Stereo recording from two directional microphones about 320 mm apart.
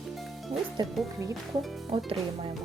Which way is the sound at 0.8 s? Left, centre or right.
Centre.